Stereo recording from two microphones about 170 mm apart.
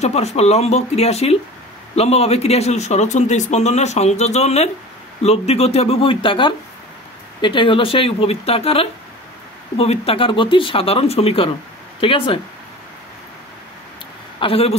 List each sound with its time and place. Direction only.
0.0 s speech: 40° left (ahead or behind)
14.4 s speech: 35° left (ahead or behind)